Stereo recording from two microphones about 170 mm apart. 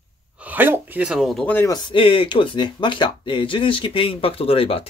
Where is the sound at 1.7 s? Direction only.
30° left (ahead or behind).